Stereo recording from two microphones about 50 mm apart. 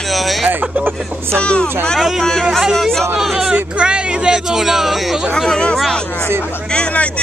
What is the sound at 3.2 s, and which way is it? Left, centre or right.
Speech, centre.